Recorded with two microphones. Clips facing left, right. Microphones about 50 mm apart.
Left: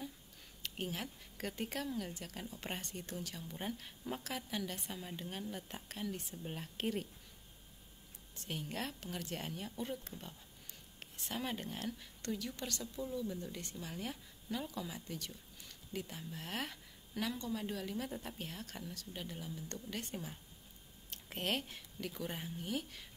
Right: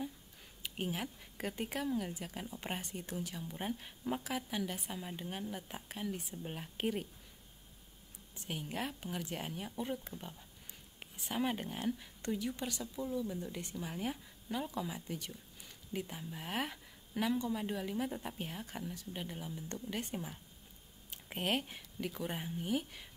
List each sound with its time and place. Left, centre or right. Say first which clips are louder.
0.6 s a woman's voice: right 3 dB; centre
8.5 s a woman's voice: right 2 dB; centre